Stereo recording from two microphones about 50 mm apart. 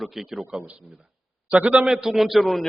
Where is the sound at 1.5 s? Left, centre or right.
Right.